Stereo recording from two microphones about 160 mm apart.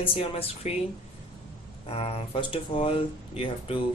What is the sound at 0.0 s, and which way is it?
Speech, 35° left (ahead or behind).